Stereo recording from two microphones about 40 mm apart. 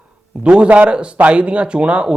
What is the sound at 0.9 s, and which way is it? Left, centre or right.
A man's voice, right.